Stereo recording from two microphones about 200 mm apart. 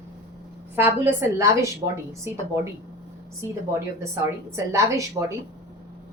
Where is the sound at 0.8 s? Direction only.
10° right (ahead or behind).